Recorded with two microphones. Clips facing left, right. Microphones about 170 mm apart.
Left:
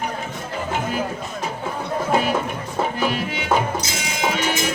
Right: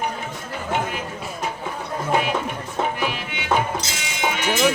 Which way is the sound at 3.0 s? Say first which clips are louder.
Left 4 dB; 40° left (ahead or behind).